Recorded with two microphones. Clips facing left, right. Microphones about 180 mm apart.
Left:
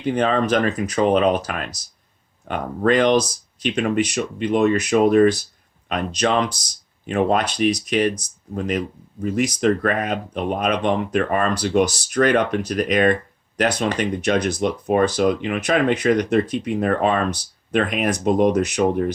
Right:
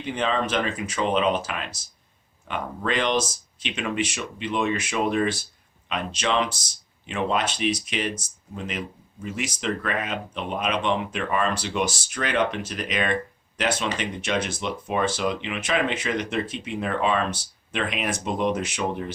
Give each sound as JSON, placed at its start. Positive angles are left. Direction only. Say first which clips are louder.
{"t": 0.0, "sound": "speech", "louder": "left 6 dB", "side_deg": 45}